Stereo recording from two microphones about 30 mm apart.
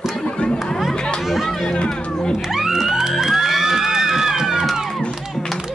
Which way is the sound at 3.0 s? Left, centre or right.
Centre.